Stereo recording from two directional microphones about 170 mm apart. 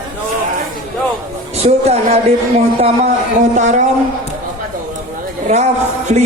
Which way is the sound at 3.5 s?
45° right (ahead or behind).